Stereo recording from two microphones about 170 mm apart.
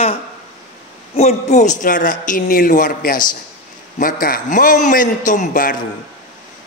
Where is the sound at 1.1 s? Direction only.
40° left (ahead or behind).